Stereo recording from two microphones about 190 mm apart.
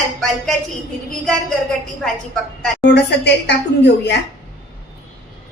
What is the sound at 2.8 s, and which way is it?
A woman's voice, 65° left (ahead or behind).